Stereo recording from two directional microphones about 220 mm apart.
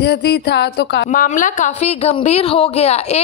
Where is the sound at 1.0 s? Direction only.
35° left (ahead or behind).